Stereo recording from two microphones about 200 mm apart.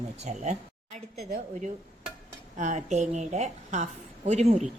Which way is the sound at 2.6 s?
35° right (ahead or behind).